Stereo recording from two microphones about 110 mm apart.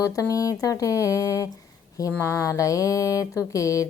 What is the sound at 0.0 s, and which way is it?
Speech, 30° left (ahead or behind).